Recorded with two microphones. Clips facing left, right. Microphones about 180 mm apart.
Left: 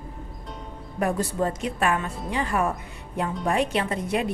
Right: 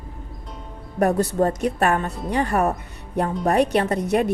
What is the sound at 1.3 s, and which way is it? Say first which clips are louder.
A woman's voice: right 6 dB; 40° right (ahead or behind).